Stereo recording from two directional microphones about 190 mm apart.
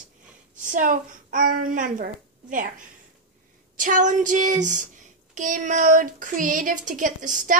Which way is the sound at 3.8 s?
40° right (ahead or behind).